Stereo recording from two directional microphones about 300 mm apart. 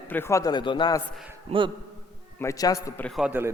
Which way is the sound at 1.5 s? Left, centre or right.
Right.